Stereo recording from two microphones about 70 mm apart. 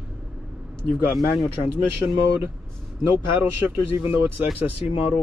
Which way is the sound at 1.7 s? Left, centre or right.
Right.